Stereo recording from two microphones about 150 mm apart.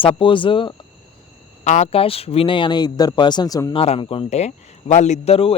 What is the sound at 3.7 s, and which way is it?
Speech, 40° left (ahead or behind).